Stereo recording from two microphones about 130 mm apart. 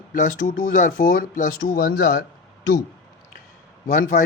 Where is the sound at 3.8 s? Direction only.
85° left.